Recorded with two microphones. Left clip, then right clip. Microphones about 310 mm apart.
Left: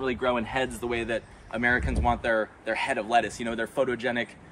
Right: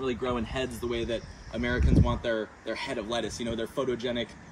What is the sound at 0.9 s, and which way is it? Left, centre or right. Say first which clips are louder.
Speech: left 2 dB; centre.